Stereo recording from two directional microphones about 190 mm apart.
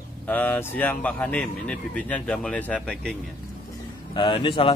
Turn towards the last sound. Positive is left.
turn(degrees=25)  # may be behind; listen again after turning